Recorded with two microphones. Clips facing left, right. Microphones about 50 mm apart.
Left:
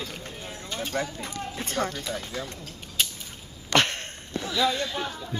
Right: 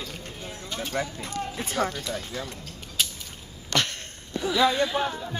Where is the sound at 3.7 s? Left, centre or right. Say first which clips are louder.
Left 4 dB; left.